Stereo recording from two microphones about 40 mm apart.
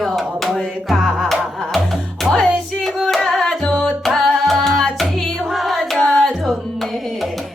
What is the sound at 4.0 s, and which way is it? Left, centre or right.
Music, centre.